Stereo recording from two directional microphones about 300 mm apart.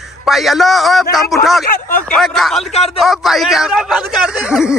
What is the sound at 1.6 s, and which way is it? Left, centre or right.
Speech, left.